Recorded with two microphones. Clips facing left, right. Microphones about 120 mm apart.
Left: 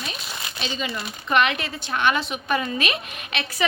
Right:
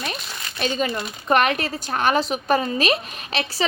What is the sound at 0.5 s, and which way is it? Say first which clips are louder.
Speech: right 7 dB; 50° right (ahead or behind).